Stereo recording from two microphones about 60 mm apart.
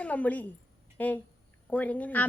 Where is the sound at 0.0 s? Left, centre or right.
Left.